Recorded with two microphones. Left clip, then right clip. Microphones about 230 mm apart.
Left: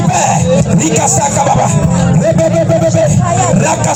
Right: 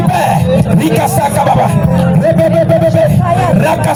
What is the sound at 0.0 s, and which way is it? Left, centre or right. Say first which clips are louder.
Speech: even; right.